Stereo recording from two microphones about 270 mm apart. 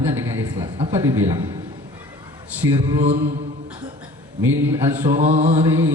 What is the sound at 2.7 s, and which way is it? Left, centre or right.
Speech, centre.